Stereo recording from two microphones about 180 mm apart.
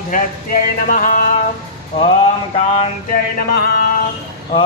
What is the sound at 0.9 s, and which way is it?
Music, 50° left (ahead or behind).